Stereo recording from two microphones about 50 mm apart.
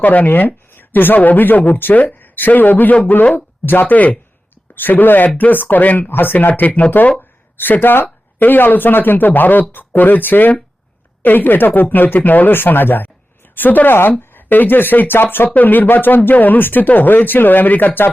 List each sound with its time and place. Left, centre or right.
0.0 s a woman's voice: left
6.6 s speech: left
7.5 s speech: left